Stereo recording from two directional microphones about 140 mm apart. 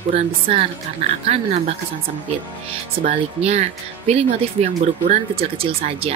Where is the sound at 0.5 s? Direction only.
40° right (ahead or behind).